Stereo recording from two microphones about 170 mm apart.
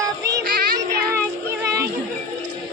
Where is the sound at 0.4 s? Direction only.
60° right (ahead or behind).